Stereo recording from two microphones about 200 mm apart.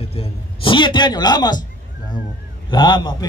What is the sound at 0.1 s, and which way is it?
A man's voice, 30° left (ahead or behind).